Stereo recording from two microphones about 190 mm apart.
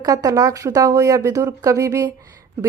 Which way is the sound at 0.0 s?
20° right (ahead or behind).